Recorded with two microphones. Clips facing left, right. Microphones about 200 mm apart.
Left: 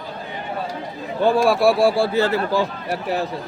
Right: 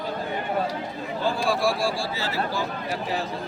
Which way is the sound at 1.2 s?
60° left (ahead or behind).